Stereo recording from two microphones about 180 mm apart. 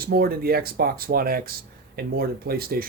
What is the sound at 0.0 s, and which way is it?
Speech, 60° right (ahead or behind).